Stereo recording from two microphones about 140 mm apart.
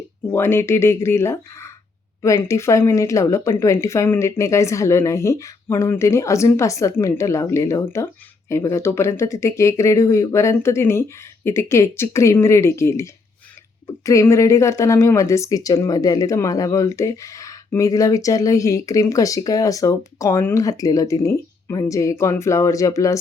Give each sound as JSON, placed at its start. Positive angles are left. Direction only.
{"t": 0.3, "sound": "speech", "side_deg": 15}